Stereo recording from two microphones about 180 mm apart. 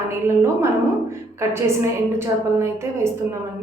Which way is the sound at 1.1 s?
15° right (ahead or behind).